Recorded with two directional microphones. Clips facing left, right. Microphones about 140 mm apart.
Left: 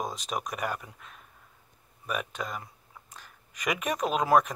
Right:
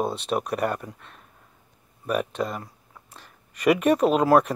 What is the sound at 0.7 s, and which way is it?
Speech, 5° left (ahead or behind).